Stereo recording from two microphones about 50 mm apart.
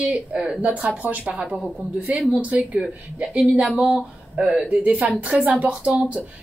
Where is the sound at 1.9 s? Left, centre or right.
Right.